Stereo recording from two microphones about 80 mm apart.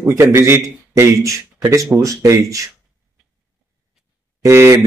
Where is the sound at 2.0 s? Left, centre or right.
Right.